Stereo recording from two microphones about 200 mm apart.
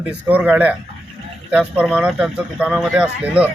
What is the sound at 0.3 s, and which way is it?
Speech, 5° right (ahead or behind).